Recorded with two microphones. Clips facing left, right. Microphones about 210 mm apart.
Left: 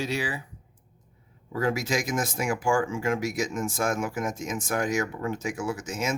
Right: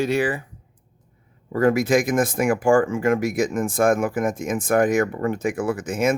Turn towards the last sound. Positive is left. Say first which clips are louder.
# right 8 dB
turn(degrees=-55)  # may be behind; listen again after turning